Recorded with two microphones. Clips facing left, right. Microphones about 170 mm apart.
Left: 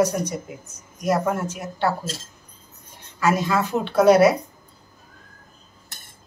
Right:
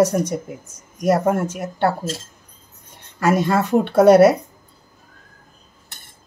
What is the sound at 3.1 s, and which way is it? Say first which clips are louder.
Speech: right 3 dB; 55° right (ahead or behind).